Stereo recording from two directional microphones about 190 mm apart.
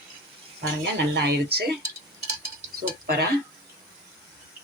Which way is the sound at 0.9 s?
60° right (ahead or behind).